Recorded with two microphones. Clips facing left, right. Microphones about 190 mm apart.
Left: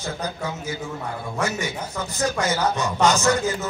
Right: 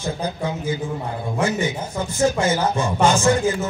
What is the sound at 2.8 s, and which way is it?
Speech, 30° right (ahead or behind).